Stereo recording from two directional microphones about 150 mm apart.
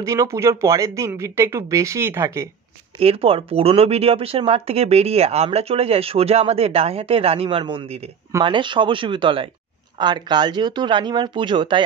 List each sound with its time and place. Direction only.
0.0 s speech: 20° right (ahead or behind)
3.0 s speech: 40° right (ahead or behind)